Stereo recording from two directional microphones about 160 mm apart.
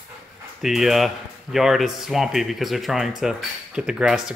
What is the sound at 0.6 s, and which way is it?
Speech, centre (ahead or behind).